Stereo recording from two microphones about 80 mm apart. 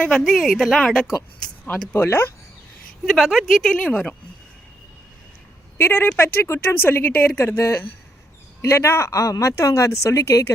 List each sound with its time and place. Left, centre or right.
0.0 s a woman's voice: centre
1.9 s speech: left
3.1 s a woman's voice: centre
5.7 s speech: left